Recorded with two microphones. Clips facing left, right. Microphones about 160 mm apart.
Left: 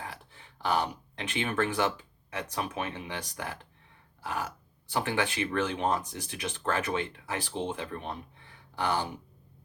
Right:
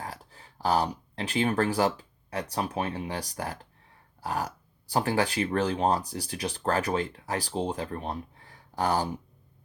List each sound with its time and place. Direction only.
0.0 s speech: 40° right (ahead or behind)